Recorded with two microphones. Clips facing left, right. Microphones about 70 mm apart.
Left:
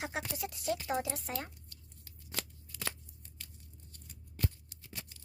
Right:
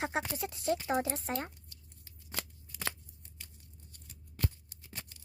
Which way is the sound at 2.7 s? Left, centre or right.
Right.